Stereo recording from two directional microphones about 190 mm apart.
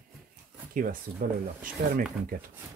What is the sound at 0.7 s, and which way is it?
Speech, 50° right (ahead or behind).